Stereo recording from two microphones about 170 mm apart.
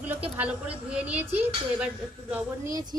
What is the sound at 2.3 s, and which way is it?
Speech, 20° right (ahead or behind).